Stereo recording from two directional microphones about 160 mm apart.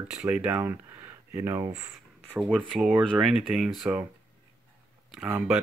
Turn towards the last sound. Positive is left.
turn(degrees=-5)  # may be behind; listen again after turning